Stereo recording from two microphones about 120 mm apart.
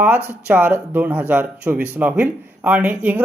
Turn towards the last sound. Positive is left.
turn(degrees=-15)  # may be behind; listen again after turning